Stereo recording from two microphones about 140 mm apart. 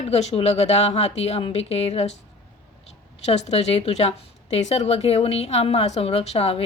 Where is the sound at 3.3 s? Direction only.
50° left (ahead or behind).